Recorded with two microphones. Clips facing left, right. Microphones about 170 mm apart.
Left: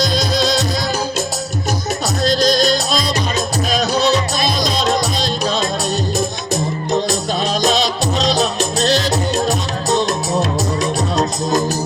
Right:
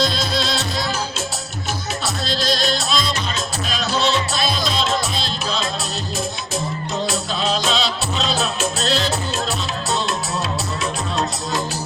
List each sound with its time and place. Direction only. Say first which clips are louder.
0.0 s music: left 4 dB; 40° left (ahead or behind)
2.2 s music: left 8 dB; 45° left (ahead or behind)
7.1 s music: left 3 dB; 40° left (ahead or behind)